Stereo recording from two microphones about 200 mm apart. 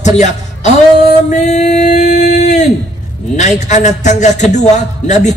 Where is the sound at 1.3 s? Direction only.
35° left (ahead or behind).